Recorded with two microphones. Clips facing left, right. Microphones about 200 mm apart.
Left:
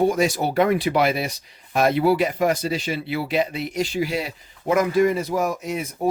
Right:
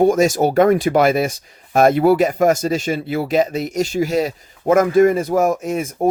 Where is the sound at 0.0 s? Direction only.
45° right (ahead or behind).